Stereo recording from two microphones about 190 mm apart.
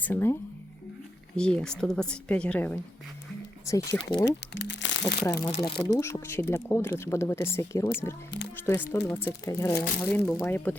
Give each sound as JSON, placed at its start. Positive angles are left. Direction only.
{"t": 0.0, "sound": "speech", "side_deg": 10}
{"t": 1.4, "sound": "speech", "side_deg": 5}
{"t": 3.8, "sound": "speech", "side_deg": 25}
{"t": 4.3, "sound": "speech", "side_deg": 65}
{"t": 5.2, "sound": "speech", "side_deg": 20}